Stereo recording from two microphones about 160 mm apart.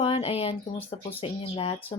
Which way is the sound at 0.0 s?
35° left (ahead or behind).